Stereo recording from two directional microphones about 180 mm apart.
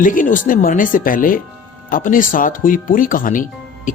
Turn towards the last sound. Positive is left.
turn(degrees=50)  # may be behind; listen again after turning